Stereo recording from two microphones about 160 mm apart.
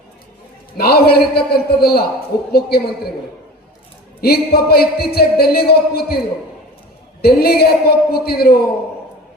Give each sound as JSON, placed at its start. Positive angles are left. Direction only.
{"t": 0.8, "sound": "speech", "side_deg": 75}
{"t": 4.2, "sound": "speech", "side_deg": 75}
{"t": 7.2, "sound": "speech", "side_deg": 75}